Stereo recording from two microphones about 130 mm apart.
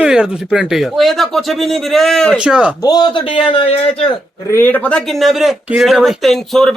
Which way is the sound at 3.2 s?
45° left (ahead or behind).